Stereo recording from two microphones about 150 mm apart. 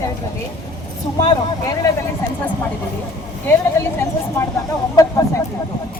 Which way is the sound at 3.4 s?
15° left (ahead or behind).